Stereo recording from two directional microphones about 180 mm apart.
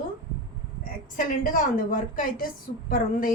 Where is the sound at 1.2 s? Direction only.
50° left (ahead or behind).